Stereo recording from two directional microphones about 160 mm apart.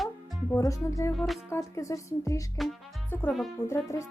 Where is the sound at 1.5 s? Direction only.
20° left (ahead or behind).